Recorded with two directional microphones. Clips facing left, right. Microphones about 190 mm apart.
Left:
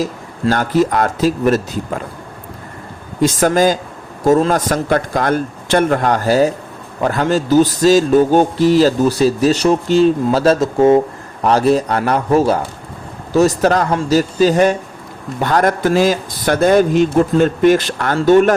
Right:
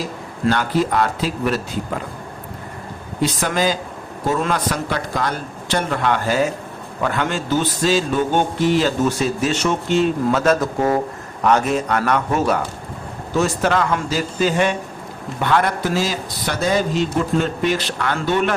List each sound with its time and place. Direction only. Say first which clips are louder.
0.0 s a man's voice: left 3 dB; 45° left (ahead or behind)
3.2 s a man's voice: left 7 dB; 45° left (ahead or behind)